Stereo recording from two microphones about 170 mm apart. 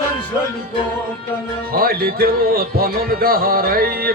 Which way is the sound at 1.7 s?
60° right (ahead or behind).